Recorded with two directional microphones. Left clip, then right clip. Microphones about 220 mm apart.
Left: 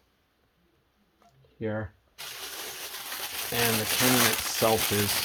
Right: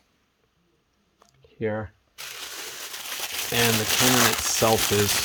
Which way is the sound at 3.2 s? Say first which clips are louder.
Right 5 dB; 40° right (ahead or behind).